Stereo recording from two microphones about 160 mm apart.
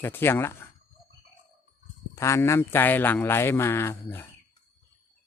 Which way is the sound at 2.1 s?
20° left (ahead or behind).